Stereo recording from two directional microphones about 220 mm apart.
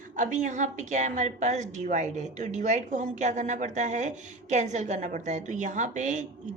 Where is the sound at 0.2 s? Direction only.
35° right (ahead or behind).